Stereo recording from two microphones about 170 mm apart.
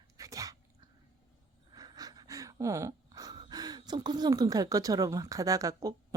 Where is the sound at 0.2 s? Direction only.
20° right (ahead or behind).